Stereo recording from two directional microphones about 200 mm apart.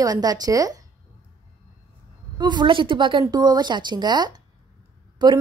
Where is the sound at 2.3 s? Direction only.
20° right (ahead or behind).